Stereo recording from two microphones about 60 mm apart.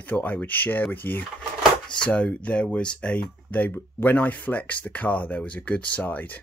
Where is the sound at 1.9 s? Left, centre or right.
Centre.